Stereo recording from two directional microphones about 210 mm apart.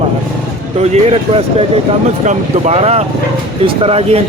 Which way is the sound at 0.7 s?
30° right (ahead or behind).